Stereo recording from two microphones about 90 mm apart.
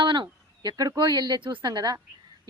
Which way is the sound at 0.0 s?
60° right (ahead or behind).